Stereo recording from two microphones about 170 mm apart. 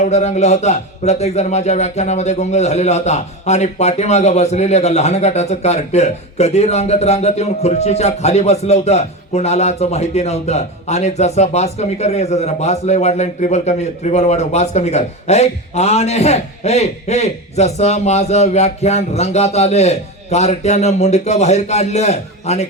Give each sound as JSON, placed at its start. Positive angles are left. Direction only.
{"t": 0.0, "sound": "a man's voice", "side_deg": 40}